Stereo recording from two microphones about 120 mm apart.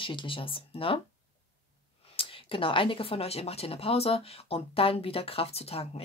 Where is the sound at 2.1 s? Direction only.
50° left (ahead or behind).